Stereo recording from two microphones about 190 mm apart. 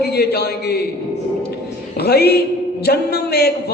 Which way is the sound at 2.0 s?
55° left (ahead or behind).